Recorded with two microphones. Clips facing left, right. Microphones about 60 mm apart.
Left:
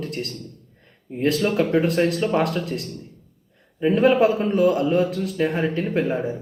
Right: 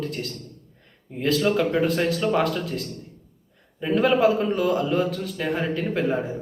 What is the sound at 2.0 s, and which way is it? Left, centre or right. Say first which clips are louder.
Speech: left 2 dB; left.